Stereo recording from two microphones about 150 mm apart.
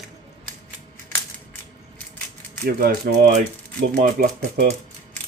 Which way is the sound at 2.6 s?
90° right.